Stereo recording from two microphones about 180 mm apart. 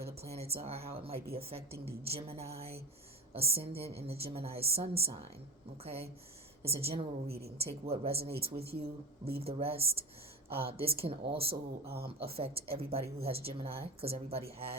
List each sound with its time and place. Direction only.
0.0 s a woman's voice: 35° right (ahead or behind)
7.3 s a woman's voice: 60° right (ahead or behind)
7.6 s a woman's voice: 35° right (ahead or behind)